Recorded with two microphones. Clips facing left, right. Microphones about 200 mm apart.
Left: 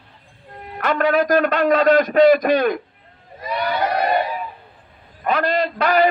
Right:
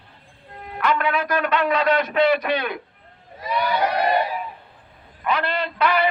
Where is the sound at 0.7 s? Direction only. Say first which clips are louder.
Left 4 dB; 45° left (ahead or behind).